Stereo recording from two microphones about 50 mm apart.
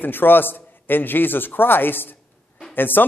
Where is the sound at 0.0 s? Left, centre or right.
Left.